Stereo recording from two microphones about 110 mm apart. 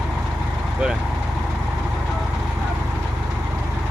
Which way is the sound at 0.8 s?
10° right (ahead or behind).